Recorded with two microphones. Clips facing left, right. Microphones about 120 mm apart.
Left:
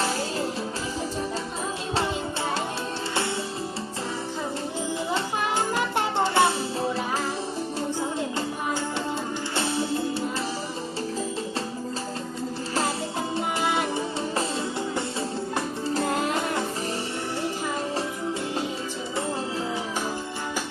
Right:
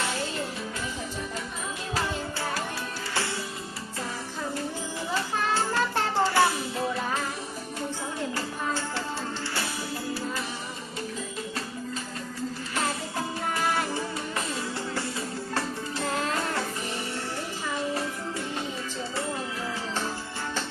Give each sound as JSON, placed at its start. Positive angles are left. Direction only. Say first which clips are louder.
{"t": 5.1, "sound": "music", "louder": "right 1 dB", "side_deg": 20}
{"t": 9.6, "sound": "music", "louder": "left 7 dB", "side_deg": 25}
{"t": 12.7, "sound": "music", "louder": "left 4 dB", "side_deg": 30}